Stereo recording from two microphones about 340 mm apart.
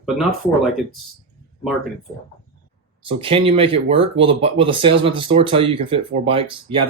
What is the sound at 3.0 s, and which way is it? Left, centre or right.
Speech, centre.